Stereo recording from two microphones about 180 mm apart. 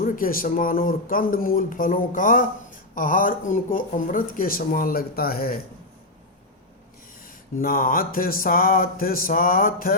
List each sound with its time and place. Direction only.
0.0 s speech: 50° left (ahead or behind)
7.6 s speech: 50° left (ahead or behind)